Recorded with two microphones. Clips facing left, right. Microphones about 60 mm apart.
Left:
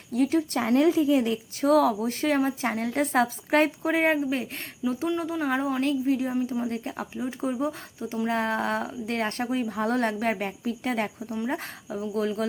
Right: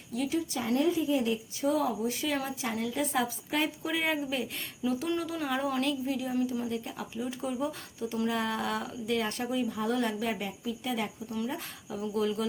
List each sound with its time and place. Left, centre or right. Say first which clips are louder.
0.1 s speech: left 7 dB; left
2.2 s a woman's voice: left 8 dB; left
3.8 s speech: left 7 dB; left
5.1 s speech: left 5 dB; left
5.8 s a woman's voice: left 6 dB; left
11.9 s speech: left 2 dB; left